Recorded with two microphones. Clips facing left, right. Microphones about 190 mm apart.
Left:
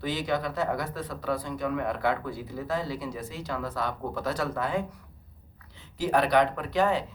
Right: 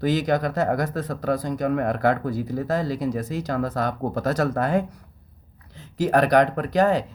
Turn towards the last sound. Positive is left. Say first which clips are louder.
# right 6 dB
turn(degrees=-40)  # may be behind; listen again after turning